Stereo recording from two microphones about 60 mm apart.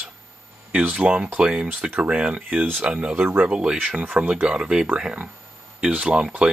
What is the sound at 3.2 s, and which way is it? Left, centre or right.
Speech, right.